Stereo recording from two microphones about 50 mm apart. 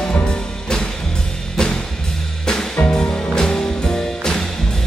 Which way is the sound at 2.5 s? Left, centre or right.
Centre.